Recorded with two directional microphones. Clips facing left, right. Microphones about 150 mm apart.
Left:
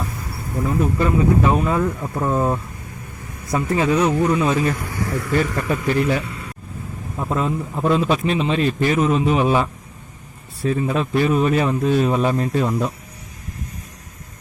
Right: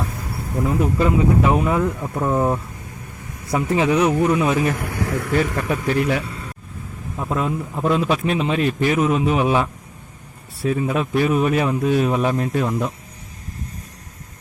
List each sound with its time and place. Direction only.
0.6 s speech: 15° right (ahead or behind)
2.3 s speech: 15° right (ahead or behind)
4.8 s a sound: 70° right (ahead or behind)
5.3 s a man's voice: 5° right (ahead or behind)